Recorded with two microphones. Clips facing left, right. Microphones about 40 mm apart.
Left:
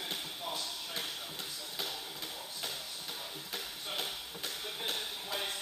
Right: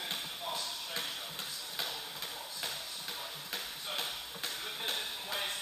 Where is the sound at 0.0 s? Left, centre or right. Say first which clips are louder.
Even; right.